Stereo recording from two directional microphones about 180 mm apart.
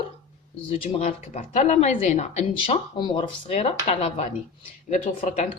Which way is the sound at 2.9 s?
25° left (ahead or behind).